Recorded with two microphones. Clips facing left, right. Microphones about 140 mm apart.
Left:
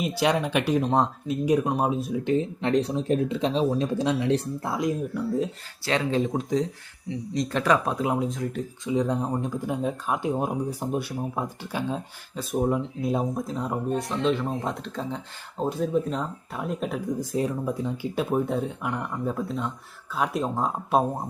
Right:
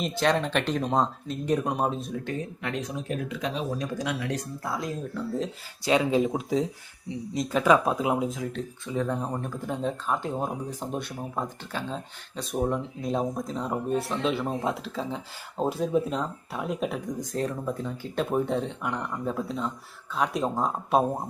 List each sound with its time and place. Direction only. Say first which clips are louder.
0.0 s speech: left 1 dB; 10° left (ahead or behind)
2.2 s speech: left 8 dB; 25° left (ahead or behind)
5.8 s speech: right 2 dB; 15° right (ahead or behind)
8.9 s speech: left 4 dB; 15° left (ahead or behind)